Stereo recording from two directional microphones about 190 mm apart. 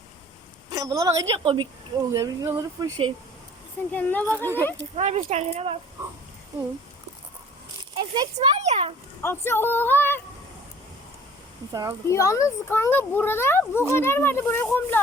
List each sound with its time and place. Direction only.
0.7 s a woman's voice: 20° right (ahead or behind)
3.9 s a child's voice: 10° left (ahead or behind)
4.4 s a woman's voice: 15° right (ahead or behind)
4.9 s speech: 35° right (ahead or behind)
7.9 s a child's voice: 20° right (ahead or behind)
8.4 s a child's voice: 35° right (ahead or behind)
9.2 s a child's voice: 10° left (ahead or behind)
11.7 s a child's voice: 20° right (ahead or behind)
12.0 s a child's voice: 15° left (ahead or behind)